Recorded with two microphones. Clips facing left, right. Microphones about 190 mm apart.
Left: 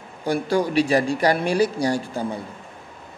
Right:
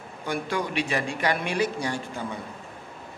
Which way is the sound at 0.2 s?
35° left (ahead or behind).